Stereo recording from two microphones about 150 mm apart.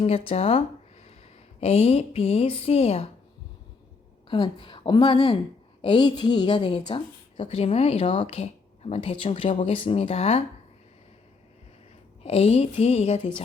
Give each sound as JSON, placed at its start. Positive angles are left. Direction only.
{"t": 0.0, "sound": "a woman's voice", "side_deg": 40}
{"t": 1.6, "sound": "a woman's voice", "side_deg": 45}
{"t": 4.3, "sound": "a woman's voice", "side_deg": 35}
{"t": 12.2, "sound": "a woman's voice", "side_deg": 45}